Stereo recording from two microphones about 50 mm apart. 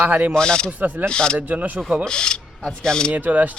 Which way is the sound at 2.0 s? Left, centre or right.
Centre.